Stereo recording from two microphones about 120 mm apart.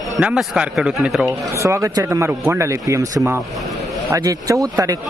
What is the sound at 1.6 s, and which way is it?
Speech, 25° right (ahead or behind).